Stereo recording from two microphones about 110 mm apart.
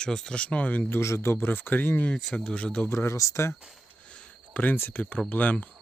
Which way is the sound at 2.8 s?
25° left (ahead or behind).